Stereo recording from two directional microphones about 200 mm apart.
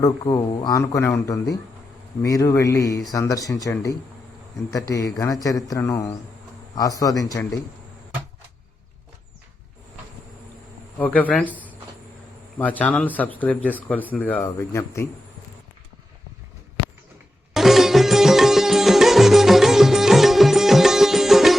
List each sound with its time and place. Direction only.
0.0 s speech: 20° left (ahead or behind)
10.9 s speech: 10° left (ahead or behind)
11.4 s speech: 10° right (ahead or behind)
12.5 s speech: 10° left (ahead or behind)
17.5 s music: centre (ahead or behind)